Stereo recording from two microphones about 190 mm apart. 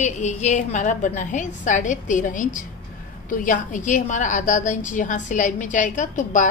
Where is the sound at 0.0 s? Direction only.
40° left (ahead or behind).